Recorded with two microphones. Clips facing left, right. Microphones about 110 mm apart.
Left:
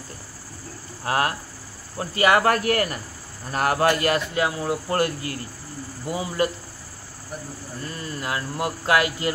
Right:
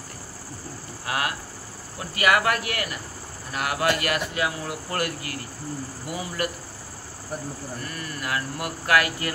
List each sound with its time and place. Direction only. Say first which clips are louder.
1.0 s speech: left 5 dB; 35° left (ahead or behind)
7.8 s speech: left 5 dB; 25° left (ahead or behind)